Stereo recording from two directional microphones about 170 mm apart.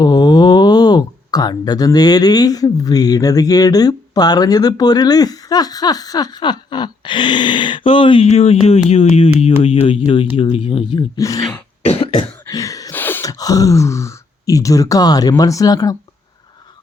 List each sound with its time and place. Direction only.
0.0 s speech: 25° left (ahead or behind)
11.2 s speech: 20° left (ahead or behind)
11.9 s cough: 35° left (ahead or behind)
12.5 s a sound: 20° left (ahead or behind)